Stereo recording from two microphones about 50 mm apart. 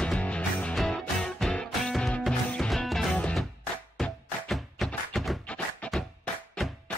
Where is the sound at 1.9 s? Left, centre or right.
Centre.